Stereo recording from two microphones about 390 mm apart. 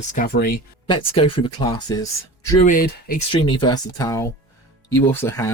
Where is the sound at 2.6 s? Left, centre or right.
Left.